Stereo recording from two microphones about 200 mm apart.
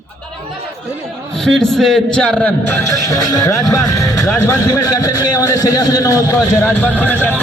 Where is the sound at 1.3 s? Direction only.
Centre (ahead or behind).